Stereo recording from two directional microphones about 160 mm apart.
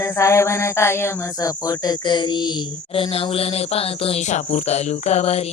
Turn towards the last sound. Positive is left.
turn(degrees=40)  # may be behind; listen again after turning